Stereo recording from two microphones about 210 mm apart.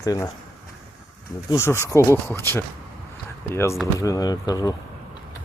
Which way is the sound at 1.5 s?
15° left (ahead or behind).